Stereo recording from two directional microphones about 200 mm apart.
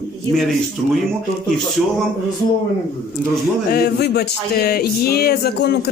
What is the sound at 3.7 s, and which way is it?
Music, 50° left (ahead or behind).